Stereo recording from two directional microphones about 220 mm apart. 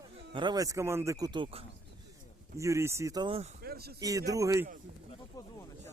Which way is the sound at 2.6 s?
15° right (ahead or behind).